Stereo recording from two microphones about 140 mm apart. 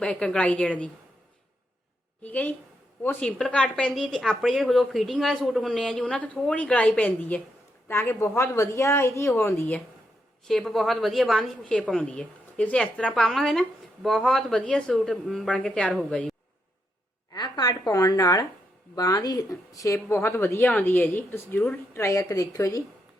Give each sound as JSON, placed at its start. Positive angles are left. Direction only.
{"t": 0.0, "sound": "a woman's voice", "side_deg": 10}
{"t": 2.2, "sound": "a woman's voice", "side_deg": 10}
{"t": 10.4, "sound": "a woman's voice", "side_deg": 0}
{"t": 17.3, "sound": "speech", "side_deg": 30}